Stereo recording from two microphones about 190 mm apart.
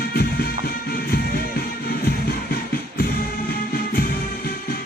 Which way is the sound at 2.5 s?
50° left (ahead or behind).